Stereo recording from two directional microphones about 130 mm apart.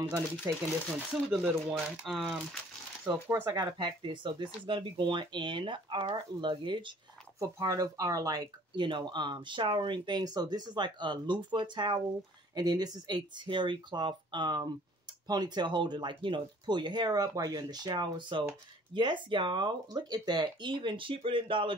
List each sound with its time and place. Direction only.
0.5 s speech: 20° right (ahead or behind)
1.1 s speech: 5° right (ahead or behind)
3.4 s speech: 35° right (ahead or behind)
7.3 s speech: 25° right (ahead or behind); by 21.7 s 40° right (ahead or behind)